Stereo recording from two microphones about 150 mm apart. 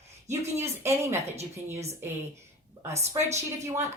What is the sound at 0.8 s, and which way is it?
Speech, 15° right (ahead or behind).